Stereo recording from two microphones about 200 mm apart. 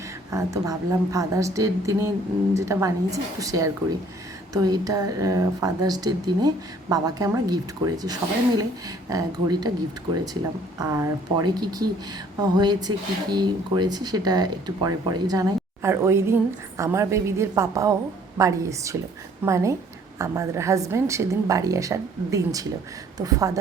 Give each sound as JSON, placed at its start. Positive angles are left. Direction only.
{"t": 0.3, "sound": "speech", "side_deg": -15}
{"t": 10.8, "sound": "speech", "side_deg": -20}